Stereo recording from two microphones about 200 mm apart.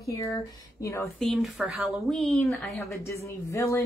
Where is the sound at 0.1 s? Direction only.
15° left (ahead or behind).